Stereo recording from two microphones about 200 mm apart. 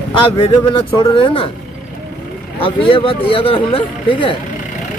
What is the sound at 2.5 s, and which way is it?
Speech, 25° left (ahead or behind).